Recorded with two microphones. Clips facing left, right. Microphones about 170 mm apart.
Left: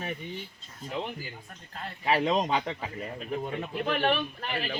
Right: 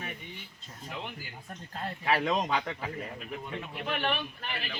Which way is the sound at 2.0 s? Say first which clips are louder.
Left 3 dB; 25° left (ahead or behind).